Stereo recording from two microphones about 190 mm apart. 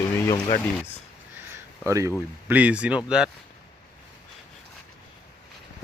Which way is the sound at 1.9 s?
15° right (ahead or behind).